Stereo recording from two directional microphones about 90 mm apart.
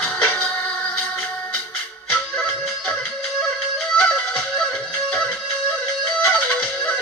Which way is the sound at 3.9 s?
10° left (ahead or behind).